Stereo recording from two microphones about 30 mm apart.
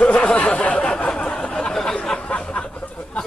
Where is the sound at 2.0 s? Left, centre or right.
Left.